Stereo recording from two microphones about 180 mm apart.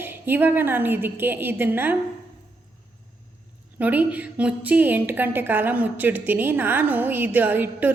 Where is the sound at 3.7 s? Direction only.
10° right (ahead or behind).